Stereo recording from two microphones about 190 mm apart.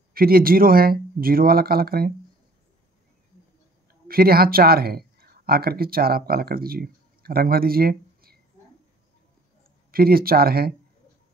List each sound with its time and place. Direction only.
0.1 s speech: 50° right (ahead or behind)
4.1 s speech: 50° right (ahead or behind)
9.8 s speech: 50° right (ahead or behind)